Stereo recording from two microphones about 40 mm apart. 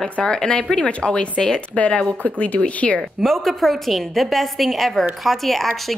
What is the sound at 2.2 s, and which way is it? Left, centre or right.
Speech, left.